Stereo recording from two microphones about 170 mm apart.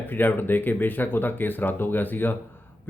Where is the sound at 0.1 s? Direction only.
10° left (ahead or behind).